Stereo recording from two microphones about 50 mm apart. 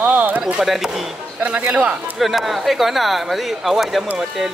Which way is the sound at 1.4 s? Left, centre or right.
Right.